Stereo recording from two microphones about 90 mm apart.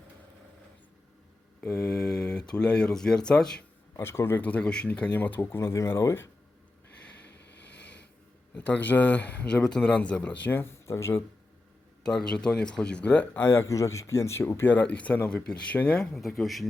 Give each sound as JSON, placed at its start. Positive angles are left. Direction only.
{"t": 1.7, "sound": "mantra", "side_deg": 10}
{"t": 2.5, "sound": "speech", "side_deg": 10}
{"t": 3.9, "sound": "speech", "side_deg": 30}
{"t": 4.4, "sound": "speech", "side_deg": 15}
{"t": 8.5, "sound": "speech", "side_deg": 15}
{"t": 12.0, "sound": "speech", "side_deg": 10}
{"t": 16.1, "sound": "speech", "side_deg": 0}